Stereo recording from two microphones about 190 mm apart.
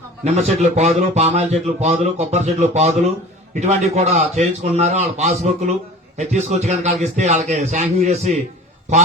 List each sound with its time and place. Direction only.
0.3 s speech: 35° right (ahead or behind)